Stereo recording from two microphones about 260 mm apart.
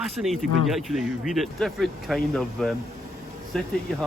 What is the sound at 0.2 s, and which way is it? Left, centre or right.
Speech, centre.